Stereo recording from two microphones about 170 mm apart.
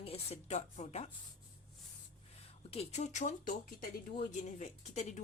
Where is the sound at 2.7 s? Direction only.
40° left (ahead or behind).